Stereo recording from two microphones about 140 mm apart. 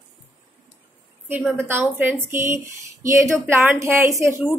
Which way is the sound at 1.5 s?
15° right (ahead or behind).